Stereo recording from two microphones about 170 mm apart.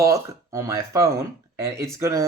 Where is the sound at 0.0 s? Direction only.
15° right (ahead or behind).